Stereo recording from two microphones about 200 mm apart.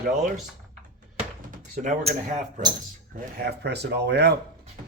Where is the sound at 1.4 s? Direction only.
40° right (ahead or behind).